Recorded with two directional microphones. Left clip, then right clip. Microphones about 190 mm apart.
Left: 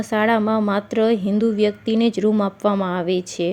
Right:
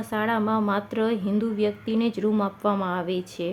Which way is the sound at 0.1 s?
30° left (ahead or behind).